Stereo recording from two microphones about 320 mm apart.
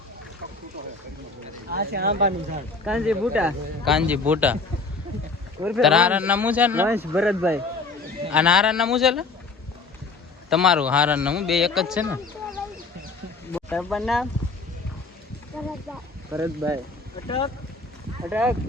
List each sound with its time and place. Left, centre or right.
1.7 s speech: right
2.8 s a man's voice: centre
5.6 s a man's voice: centre
10.5 s a man's voice: centre
16.3 s speech: centre
17.2 s speech: centre
18.3 s a man's voice: centre